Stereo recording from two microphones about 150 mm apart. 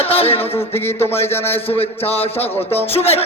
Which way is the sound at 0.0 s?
40° left (ahead or behind).